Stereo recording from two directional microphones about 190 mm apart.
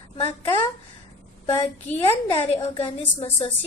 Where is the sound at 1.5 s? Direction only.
25° left (ahead or behind).